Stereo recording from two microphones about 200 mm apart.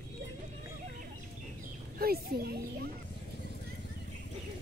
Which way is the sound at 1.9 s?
50° right (ahead or behind).